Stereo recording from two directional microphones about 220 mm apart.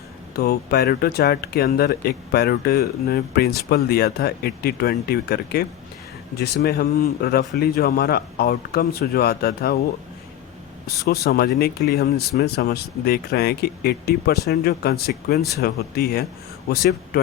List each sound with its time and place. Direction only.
0.3 s speech: 45° left (ahead or behind)
11.1 s speech: 45° left (ahead or behind)